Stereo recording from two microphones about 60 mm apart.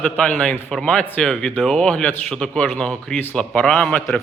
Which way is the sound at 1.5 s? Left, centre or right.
Left.